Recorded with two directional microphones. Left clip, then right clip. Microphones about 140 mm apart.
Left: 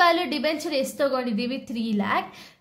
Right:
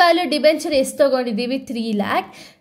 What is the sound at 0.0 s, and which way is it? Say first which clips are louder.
A child's voice: right 7 dB; 30° right (ahead or behind).